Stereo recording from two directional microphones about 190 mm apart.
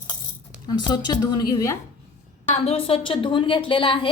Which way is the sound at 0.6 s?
20° left (ahead or behind).